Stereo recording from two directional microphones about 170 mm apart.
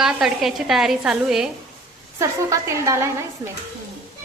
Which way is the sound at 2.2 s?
15° right (ahead or behind).